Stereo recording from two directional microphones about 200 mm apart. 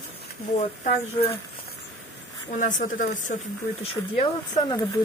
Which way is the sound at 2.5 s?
40° left (ahead or behind).